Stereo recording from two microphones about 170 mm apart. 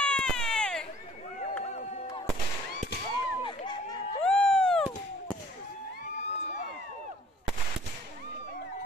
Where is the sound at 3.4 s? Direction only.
25° left (ahead or behind).